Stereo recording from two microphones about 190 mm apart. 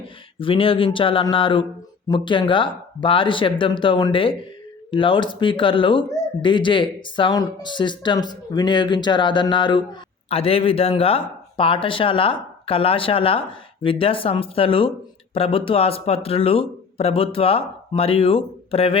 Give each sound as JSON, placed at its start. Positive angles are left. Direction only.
{"t": 0.3, "sound": "speech", "side_deg": 30}